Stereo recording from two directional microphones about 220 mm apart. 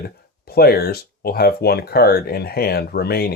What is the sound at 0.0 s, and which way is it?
Speech, 45° left (ahead or behind).